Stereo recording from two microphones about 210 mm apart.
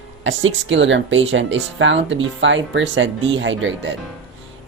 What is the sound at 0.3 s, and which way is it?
Speech, 65° right (ahead or behind).